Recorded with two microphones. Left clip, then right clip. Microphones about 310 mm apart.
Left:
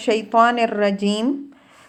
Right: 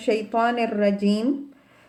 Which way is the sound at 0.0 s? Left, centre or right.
Left.